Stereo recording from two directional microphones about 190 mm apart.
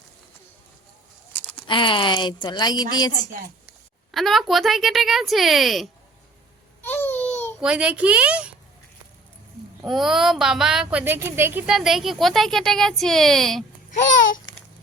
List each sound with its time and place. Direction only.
1.6 s speech: 25° left (ahead or behind)
4.1 s speech: centre (ahead or behind)
6.8 s babbling: 10° left (ahead or behind)
7.6 s a woman's voice: 5° right (ahead or behind)
9.8 s speech: centre (ahead or behind)